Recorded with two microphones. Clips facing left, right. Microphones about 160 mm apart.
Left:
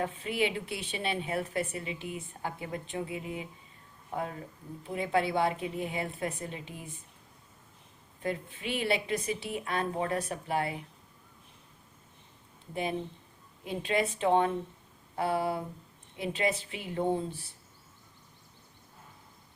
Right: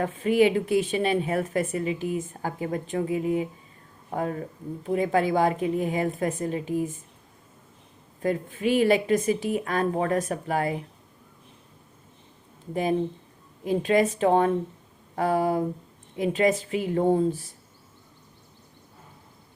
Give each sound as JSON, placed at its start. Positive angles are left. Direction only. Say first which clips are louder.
{"t": 0.0, "sound": "a woman's voice", "louder": "right 10 dB", "side_deg": -40}
{"t": 8.2, "sound": "a woman's voice", "louder": "right 9 dB", "side_deg": -45}
{"t": 12.7, "sound": "a woman's voice", "louder": "right 9 dB", "side_deg": -40}